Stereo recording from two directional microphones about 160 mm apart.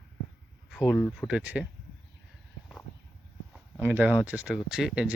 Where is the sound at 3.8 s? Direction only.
10° right (ahead or behind).